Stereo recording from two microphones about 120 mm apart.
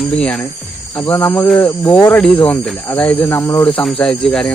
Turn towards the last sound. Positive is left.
turn(degrees=5)  # may be behind; listen again after turning